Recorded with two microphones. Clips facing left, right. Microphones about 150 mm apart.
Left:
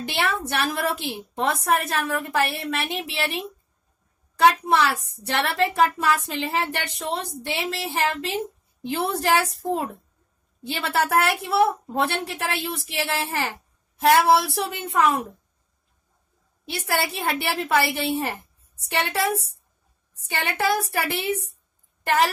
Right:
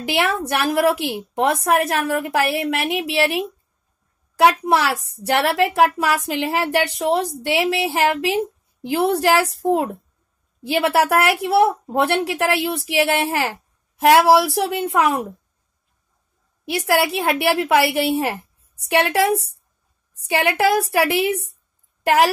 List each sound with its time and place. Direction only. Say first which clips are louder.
0.0 s a woman's voice: right 5 dB; 90° right; by 4.9 s 70° right (ahead or behind)
5.2 s a woman's voice: right 5 dB; 85° right
8.8 s a woman's voice: right 7 dB; 70° right (ahead or behind)
9.6 s speech: right 7 dB; 45° right (ahead or behind)
10.7 s a woman's voice: right 6 dB; 75° right (ahead or behind)
16.7 s a woman's voice: right 7 dB; 85° right; by 19.3 s 70° right (ahead or behind)
20.2 s a woman's voice: right 6 dB; 85° right